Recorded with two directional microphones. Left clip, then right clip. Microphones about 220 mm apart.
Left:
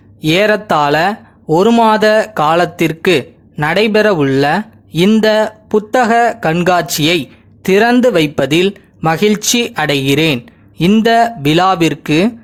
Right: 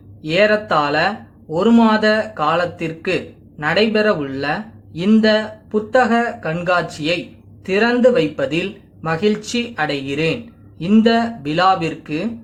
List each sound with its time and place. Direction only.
0.2 s speech: 45° left (ahead or behind)